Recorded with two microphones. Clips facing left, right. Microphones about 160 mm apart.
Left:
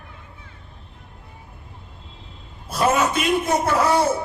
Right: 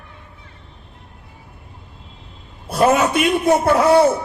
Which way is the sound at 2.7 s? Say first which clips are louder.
Right 4 dB; 60° right (ahead or behind).